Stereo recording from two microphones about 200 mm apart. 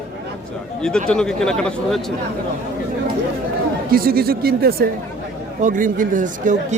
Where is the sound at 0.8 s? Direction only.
5° left (ahead or behind).